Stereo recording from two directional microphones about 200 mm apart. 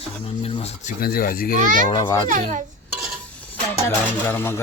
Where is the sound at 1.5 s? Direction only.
40° right (ahead or behind).